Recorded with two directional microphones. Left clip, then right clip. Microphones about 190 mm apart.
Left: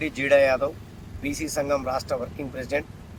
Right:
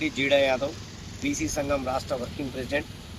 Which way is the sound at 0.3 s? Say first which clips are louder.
Left 4 dB; 10° left (ahead or behind).